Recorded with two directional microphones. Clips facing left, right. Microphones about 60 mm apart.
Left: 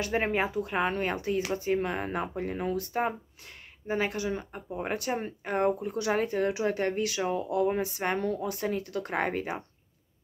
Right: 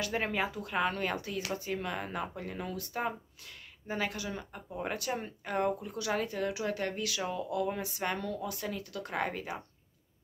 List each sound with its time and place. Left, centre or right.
0.0 s speech: left